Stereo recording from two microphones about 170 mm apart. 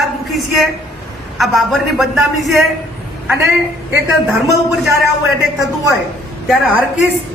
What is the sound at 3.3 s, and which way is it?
Speech, 15° right (ahead or behind).